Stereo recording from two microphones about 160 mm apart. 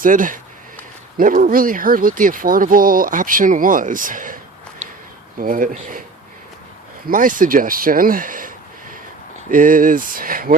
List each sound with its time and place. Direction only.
0.0 s speech: 55° right (ahead or behind)
5.4 s speech: 60° right (ahead or behind)
7.1 s speech: 55° right (ahead or behind)